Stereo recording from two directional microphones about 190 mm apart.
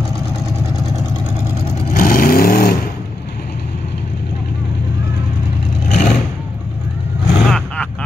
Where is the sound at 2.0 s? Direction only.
45° left (ahead or behind).